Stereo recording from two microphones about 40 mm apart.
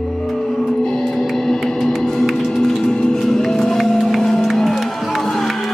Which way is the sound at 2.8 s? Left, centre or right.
Centre.